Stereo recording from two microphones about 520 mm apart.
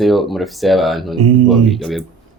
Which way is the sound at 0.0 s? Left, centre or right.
Centre.